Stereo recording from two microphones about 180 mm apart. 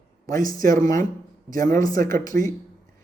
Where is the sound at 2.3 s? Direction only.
55° right (ahead or behind).